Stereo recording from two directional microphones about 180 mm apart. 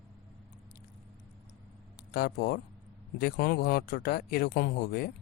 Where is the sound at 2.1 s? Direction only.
60° left (ahead or behind).